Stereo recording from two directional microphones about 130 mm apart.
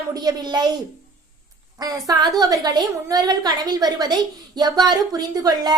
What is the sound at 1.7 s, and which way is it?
Speech, 30° right (ahead or behind).